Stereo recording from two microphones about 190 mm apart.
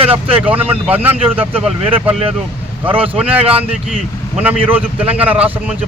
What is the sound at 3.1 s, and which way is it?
Speech, 5° right (ahead or behind).